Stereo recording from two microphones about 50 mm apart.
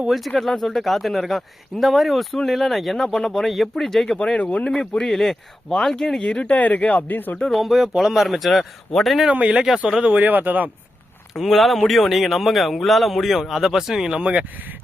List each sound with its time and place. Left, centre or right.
0.3 s speech: centre
4.2 s speech: centre; by 7.3 s left
7.3 s speech: centre
7.6 s speech: centre
9.3 s speech: right
10.1 s speech: right
11.3 s speech: centre
14.2 s speech: right